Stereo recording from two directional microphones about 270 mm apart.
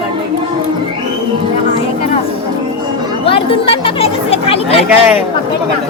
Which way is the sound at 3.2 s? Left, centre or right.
Centre.